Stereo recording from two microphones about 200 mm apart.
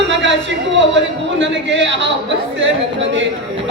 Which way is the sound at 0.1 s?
65° right (ahead or behind).